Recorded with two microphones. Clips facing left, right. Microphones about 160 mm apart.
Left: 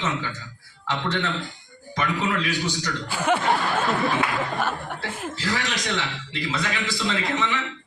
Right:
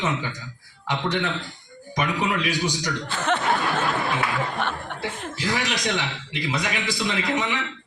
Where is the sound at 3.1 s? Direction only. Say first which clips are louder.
Left 2 dB; 10° left (ahead or behind).